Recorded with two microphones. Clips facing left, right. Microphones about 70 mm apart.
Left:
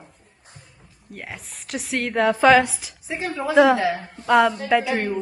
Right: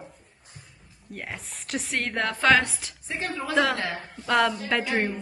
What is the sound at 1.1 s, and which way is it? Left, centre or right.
A woman's voice, centre.